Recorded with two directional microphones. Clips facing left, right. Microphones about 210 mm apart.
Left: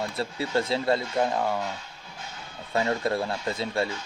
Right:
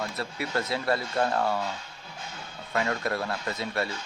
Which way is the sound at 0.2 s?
25° left (ahead or behind).